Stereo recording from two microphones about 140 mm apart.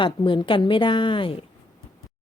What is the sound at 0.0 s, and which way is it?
A woman's voice, 35° left (ahead or behind).